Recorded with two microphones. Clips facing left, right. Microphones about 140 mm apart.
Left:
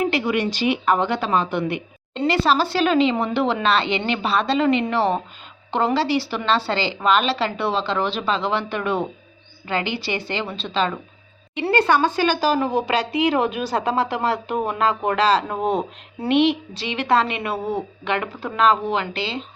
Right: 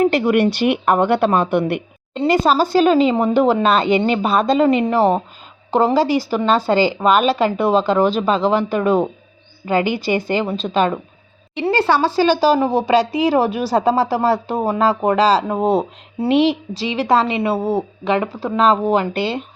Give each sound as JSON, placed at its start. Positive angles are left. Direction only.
{"t": 0.0, "sound": "speech", "side_deg": -45}
{"t": 2.2, "sound": "a woman's voice", "side_deg": -45}
{"t": 11.5, "sound": "a woman's voice", "side_deg": -30}